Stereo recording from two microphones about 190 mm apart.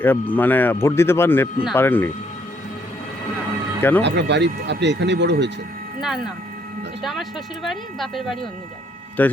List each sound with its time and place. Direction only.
0.0 s speech: 10° left (ahead or behind)
3.8 s speech: 10° left (ahead or behind)
4.0 s speech: 65° right (ahead or behind)
6.0 s speech: centre (ahead or behind)